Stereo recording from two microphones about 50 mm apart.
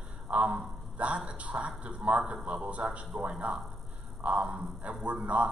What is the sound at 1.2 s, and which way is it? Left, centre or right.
A man's voice, right.